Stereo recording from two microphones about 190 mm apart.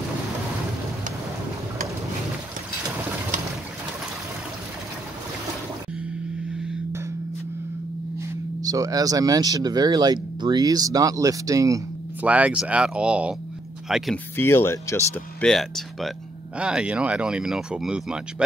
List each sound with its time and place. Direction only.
8.6 s speech: 20° right (ahead or behind); by 14.2 s centre (ahead or behind)
14.3 s speech: 10° left (ahead or behind)
15.4 s speech: centre (ahead or behind)